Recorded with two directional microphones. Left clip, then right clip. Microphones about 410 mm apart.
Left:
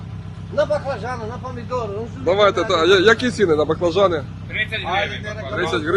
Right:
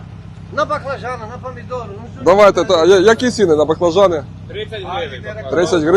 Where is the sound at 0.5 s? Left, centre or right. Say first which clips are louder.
Right 1 dB; right.